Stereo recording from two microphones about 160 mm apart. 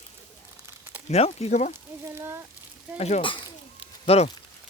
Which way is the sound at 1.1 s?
40° left (ahead or behind).